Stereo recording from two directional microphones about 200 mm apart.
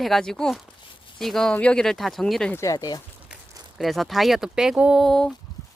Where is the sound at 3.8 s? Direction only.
Centre (ahead or behind).